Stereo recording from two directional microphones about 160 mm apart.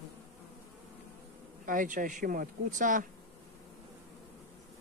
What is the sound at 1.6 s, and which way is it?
Speech, 55° right (ahead or behind).